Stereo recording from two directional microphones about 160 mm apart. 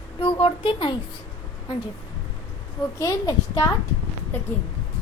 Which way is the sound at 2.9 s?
20° left (ahead or behind).